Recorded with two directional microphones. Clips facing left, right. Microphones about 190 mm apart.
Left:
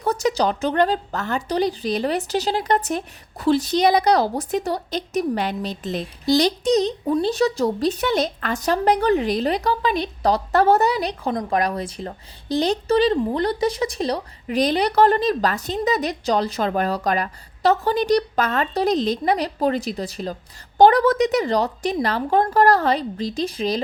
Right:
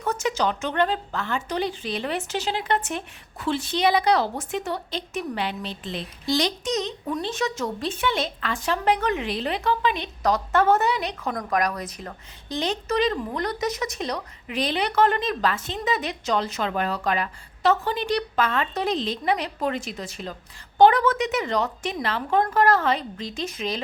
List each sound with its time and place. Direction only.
0.0 s a woman's voice: 35° left (ahead or behind)